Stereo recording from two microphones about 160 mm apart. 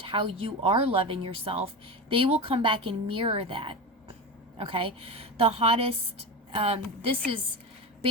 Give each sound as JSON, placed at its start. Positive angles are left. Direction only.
{"t": 0.0, "sound": "speech", "side_deg": -30}